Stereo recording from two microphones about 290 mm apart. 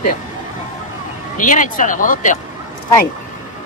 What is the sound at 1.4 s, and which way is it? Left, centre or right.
Speech, left.